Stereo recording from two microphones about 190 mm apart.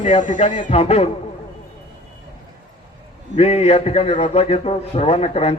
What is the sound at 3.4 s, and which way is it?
A man's voice, 30° left (ahead or behind).